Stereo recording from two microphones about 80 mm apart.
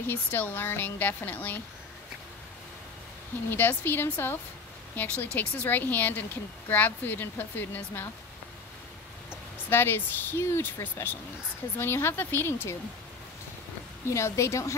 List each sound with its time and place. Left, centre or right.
0.0 s speech: left
3.4 s speech: left
9.3 s speech: left
14.0 s a woman's voice: left